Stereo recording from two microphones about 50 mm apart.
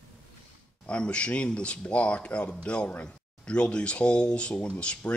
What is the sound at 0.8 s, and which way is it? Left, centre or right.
Speech, left.